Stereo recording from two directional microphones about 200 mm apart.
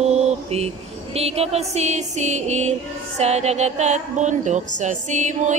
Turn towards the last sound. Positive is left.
turn(degrees=-35)  # may be behind; listen again after turning